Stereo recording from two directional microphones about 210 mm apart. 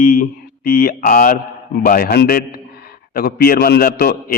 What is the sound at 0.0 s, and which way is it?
Speech, 45° left (ahead or behind).